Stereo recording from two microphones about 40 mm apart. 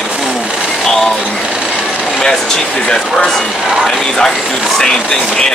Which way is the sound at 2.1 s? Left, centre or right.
Centre.